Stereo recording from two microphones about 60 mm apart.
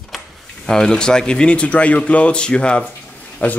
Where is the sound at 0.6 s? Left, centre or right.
Centre.